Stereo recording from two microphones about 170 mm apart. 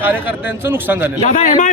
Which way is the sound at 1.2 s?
45° left (ahead or behind).